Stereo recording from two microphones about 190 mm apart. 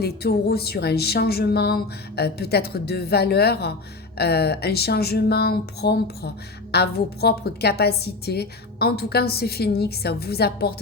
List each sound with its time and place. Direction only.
0.0 s speech: 55° left (ahead or behind)